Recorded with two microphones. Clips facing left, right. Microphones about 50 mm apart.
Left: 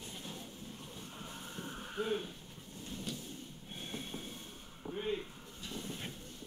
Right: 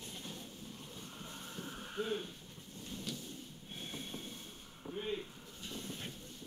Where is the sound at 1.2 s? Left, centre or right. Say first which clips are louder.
Left 2 dB; centre.